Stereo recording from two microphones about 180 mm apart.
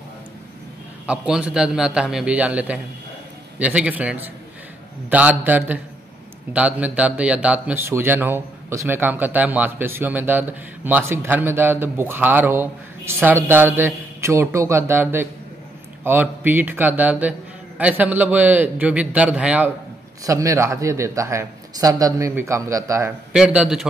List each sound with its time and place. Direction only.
1.0 s a man's voice: 5° right (ahead or behind)
20.2 s speech: 15° right (ahead or behind)
23.3 s a man's voice: 5° right (ahead or behind)